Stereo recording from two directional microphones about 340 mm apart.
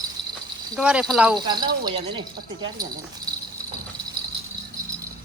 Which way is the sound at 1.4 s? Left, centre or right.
Centre.